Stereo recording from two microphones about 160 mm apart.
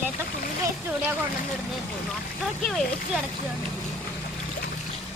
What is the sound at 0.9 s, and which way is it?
Speech, 10° right (ahead or behind).